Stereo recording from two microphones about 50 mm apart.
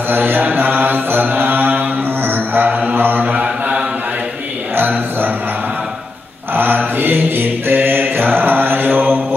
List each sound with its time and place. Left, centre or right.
0.1 s mantra: right
3.4 s mantra: right
4.7 s a sound: right
6.5 s mantra: right